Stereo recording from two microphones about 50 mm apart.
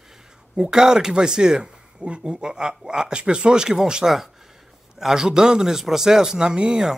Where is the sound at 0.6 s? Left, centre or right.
Centre.